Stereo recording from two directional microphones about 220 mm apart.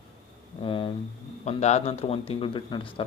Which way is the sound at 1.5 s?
30° left (ahead or behind).